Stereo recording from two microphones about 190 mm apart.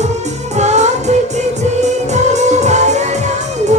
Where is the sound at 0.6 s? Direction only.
35° right (ahead or behind).